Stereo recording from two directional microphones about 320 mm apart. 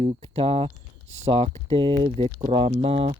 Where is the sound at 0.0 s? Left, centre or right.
Centre.